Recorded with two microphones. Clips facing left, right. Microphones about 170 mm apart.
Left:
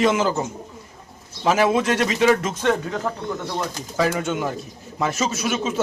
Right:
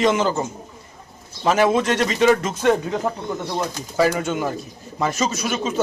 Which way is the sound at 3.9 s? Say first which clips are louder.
Right 2 dB; centre (ahead or behind).